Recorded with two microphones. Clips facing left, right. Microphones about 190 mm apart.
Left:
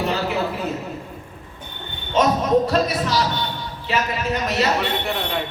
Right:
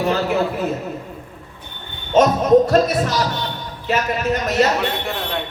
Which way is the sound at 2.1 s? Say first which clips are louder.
Right 5 dB; 45° right (ahead or behind).